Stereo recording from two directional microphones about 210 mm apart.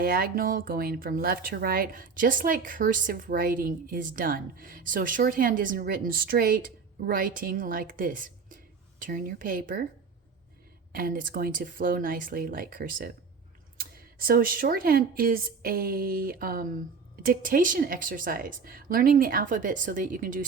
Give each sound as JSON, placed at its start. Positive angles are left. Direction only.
{"t": 0.0, "sound": "a woman's voice", "side_deg": -45}
{"t": 10.9, "sound": "a woman's voice", "side_deg": -45}